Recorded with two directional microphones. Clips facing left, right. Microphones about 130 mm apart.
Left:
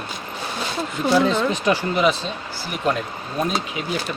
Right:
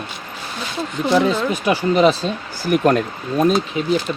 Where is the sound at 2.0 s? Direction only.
35° right (ahead or behind).